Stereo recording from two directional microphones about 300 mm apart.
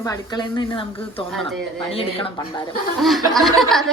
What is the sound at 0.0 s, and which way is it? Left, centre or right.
A woman's voice, centre.